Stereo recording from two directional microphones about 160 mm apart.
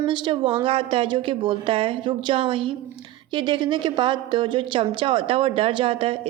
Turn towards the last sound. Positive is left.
turn(degrees=-35)  # may be behind; listen again after turning